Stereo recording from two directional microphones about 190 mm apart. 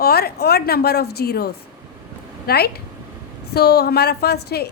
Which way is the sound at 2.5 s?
55° left (ahead or behind).